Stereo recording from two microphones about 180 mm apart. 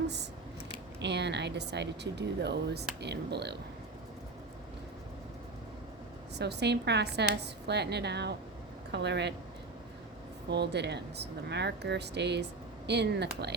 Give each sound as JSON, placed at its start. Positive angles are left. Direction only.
{"t": 1.0, "sound": "speech", "side_deg": -70}
{"t": 6.4, "sound": "speech", "side_deg": -70}
{"t": 10.5, "sound": "speech", "side_deg": -70}